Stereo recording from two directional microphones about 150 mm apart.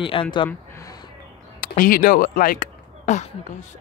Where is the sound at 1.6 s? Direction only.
70° left (ahead or behind); by 3.7 s 50° left (ahead or behind).